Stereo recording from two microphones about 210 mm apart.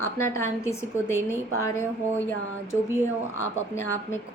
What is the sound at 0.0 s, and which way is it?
A woman's voice, 10° left (ahead or behind).